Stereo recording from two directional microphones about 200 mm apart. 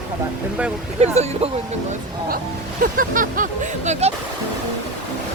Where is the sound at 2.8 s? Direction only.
45° right (ahead or behind).